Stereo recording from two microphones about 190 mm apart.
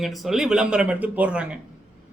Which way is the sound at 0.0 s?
Centre (ahead or behind).